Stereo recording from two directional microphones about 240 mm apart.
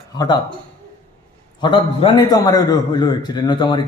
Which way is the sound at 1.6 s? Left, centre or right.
Centre.